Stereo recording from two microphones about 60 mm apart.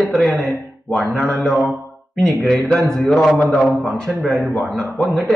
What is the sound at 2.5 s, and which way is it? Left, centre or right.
Speech, centre.